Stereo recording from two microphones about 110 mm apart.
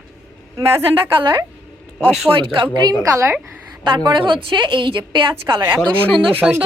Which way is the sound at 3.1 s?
25° right (ahead or behind).